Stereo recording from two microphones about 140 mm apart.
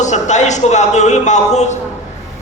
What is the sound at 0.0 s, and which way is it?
A man's voice, 55° left (ahead or behind).